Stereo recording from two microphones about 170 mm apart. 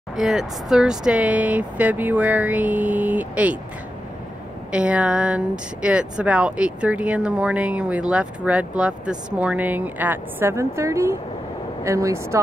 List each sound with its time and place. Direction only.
0.1 s speech: centre (ahead or behind)
4.7 s speech: 5° right (ahead or behind)